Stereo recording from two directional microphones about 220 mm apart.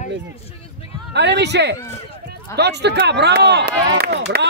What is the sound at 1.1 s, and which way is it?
Speech, 50° right (ahead or behind).